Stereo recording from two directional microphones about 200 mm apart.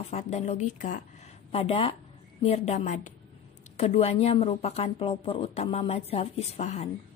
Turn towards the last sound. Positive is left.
turn(degrees=35)  # may be behind; listen again after turning